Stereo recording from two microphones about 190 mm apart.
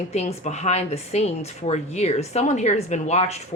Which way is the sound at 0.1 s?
35° left (ahead or behind).